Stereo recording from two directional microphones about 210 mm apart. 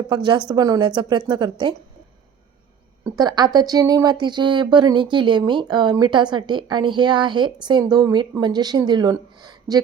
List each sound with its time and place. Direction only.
0.1 s speech: 20° right (ahead or behind)
3.0 s speech: 20° right (ahead or behind)